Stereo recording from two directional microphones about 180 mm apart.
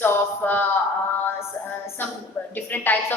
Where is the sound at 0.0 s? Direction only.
10° left (ahead or behind).